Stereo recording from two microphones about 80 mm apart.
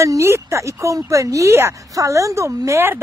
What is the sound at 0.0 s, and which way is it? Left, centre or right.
A woman's voice, right.